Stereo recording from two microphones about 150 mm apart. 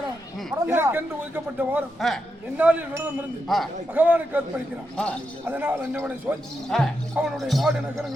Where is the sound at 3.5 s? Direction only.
Centre (ahead or behind).